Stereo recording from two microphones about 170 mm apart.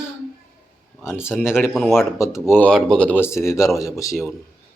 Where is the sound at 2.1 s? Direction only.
15° left (ahead or behind).